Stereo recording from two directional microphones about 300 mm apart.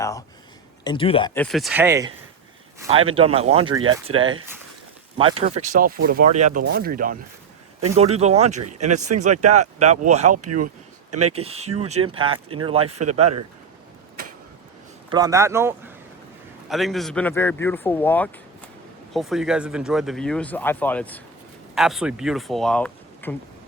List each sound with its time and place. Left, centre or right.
0.0 s speech: centre
3.2 s speech: centre
5.1 s speech: centre
9.3 s speech: right
9.6 s speech: right
10.2 s speech: right
11.3 s speech: centre
15.1 s a man's voice: centre